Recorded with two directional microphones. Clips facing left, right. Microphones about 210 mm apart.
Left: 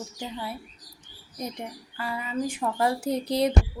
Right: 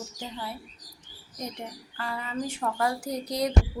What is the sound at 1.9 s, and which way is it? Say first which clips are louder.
Speech: left 3 dB; 10° left (ahead or behind).